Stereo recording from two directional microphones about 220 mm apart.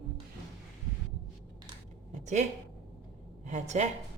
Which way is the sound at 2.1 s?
30° right (ahead or behind).